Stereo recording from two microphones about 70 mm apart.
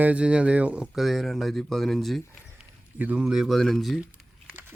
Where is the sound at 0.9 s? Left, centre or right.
Centre.